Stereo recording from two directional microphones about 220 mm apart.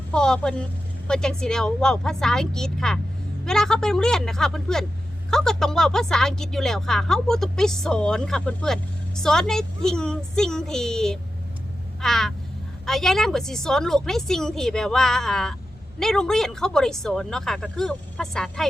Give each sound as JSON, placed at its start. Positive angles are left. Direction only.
{"t": 0.1, "sound": "speech", "side_deg": 5}
{"t": 11.9, "sound": "a sound", "side_deg": 0}
{"t": 12.8, "sound": "speech", "side_deg": 0}